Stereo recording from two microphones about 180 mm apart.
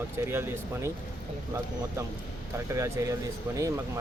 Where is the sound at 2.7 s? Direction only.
15° right (ahead or behind).